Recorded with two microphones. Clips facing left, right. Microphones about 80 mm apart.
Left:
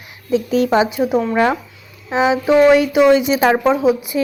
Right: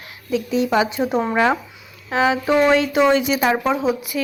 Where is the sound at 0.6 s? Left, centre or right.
Left.